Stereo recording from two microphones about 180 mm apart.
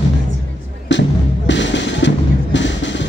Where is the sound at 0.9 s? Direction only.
80° left.